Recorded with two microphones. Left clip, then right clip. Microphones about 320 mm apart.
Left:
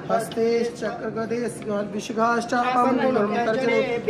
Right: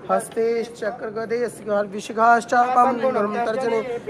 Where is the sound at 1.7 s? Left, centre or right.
Right.